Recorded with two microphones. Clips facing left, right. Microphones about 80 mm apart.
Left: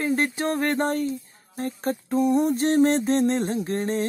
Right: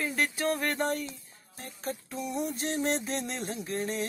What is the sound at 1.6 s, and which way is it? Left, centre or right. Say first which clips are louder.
Music: left 10 dB; left.